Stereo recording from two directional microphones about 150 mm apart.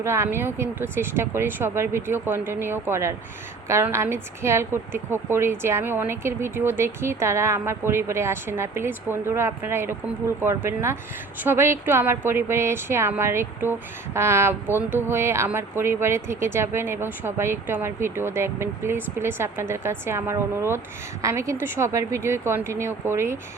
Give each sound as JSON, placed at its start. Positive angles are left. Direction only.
{"t": 0.0, "sound": "a woman's voice", "side_deg": -15}